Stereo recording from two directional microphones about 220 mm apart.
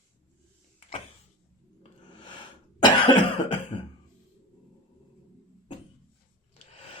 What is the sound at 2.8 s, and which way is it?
Cough, 20° left (ahead or behind).